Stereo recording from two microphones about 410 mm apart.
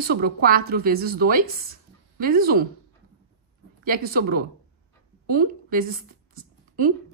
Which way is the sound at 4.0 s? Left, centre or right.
Right.